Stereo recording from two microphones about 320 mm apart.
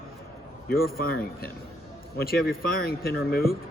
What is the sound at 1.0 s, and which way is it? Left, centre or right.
Speech, left.